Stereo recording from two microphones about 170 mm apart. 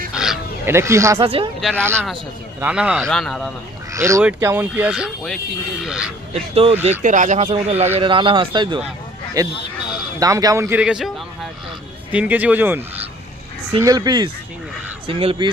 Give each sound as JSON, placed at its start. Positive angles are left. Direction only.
{"t": 0.1, "sound": "crow", "side_deg": -5}
{"t": 0.6, "sound": "speech", "side_deg": -15}
{"t": 1.2, "sound": "speech", "side_deg": -35}
{"t": 1.7, "sound": "speech", "side_deg": -15}
{"t": 3.9, "sound": "speech", "side_deg": -15}
{"t": 6.5, "sound": "speech", "side_deg": -35}
{"t": 7.0, "sound": "speech", "side_deg": -50}
{"t": 12.1, "sound": "speech", "side_deg": -10}